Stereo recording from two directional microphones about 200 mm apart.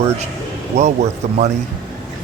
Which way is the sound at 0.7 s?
35° right (ahead or behind).